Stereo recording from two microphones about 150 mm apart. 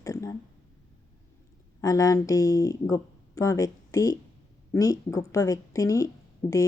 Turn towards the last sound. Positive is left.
turn(degrees=20)  # may be behind; listen again after turning